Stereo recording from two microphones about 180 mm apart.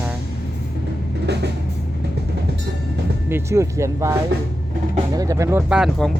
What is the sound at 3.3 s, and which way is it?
Speech, 15° right (ahead or behind).